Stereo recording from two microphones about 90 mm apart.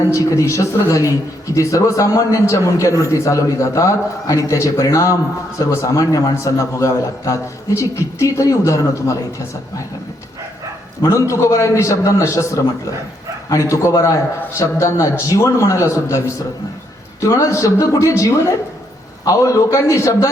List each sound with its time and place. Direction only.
0.1 s a man's voice: 35° left (ahead or behind)
11.0 s a man's voice: 35° left (ahead or behind)